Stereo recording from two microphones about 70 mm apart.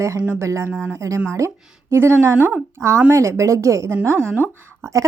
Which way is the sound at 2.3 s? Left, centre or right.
Right.